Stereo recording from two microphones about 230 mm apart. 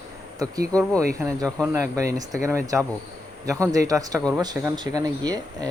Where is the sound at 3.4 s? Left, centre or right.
Centre.